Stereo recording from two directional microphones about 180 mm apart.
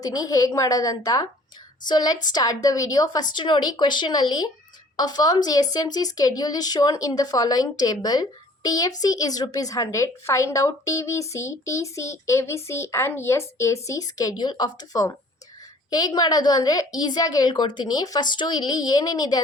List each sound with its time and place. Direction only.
0.0 s a woman's voice: 20° left (ahead or behind)